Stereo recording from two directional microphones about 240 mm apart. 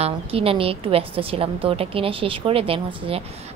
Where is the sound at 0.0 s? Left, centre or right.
Right.